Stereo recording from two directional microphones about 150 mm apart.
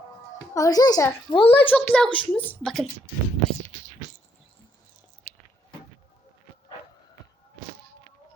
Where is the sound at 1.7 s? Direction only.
10° left (ahead or behind).